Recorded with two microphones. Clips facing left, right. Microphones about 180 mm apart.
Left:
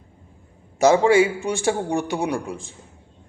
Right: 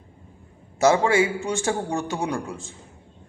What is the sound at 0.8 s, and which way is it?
A man's voice, 15° left (ahead or behind).